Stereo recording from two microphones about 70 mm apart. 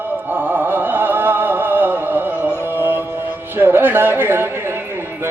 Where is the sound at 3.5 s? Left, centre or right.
Right.